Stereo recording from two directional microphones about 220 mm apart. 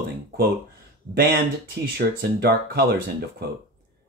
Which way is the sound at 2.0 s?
45° right (ahead or behind).